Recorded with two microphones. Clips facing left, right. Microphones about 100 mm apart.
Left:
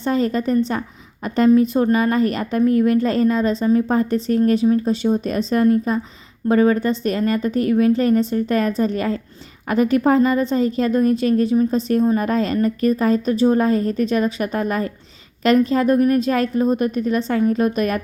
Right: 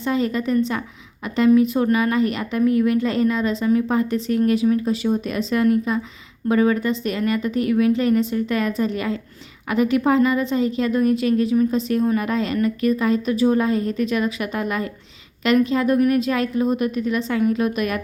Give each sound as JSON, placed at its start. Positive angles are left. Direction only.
{"t": 0.0, "sound": "a woman's voice", "side_deg": 40}